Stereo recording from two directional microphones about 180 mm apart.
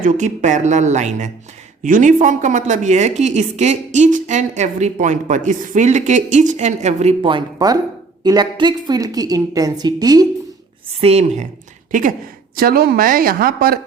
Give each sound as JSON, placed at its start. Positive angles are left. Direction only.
{"t": 0.0, "sound": "a woman's voice", "side_deg": -40}
{"t": 11.0, "sound": "a woman's voice", "side_deg": -35}
{"t": 11.9, "sound": "speech", "side_deg": -50}